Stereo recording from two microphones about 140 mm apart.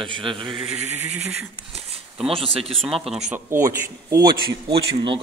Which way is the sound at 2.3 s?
40° right (ahead or behind).